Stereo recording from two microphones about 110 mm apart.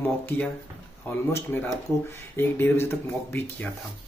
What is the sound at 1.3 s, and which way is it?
Speech, 20° left (ahead or behind).